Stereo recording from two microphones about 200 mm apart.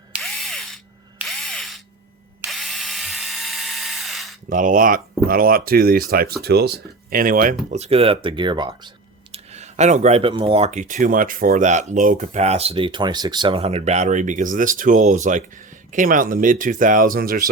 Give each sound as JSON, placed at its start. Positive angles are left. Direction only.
{"t": 0.1, "sound": "drill", "side_deg": 0}
{"t": 4.4, "sound": "speech", "side_deg": -40}
{"t": 7.7, "sound": "speech", "side_deg": -30}
{"t": 9.3, "sound": "speech", "side_deg": -35}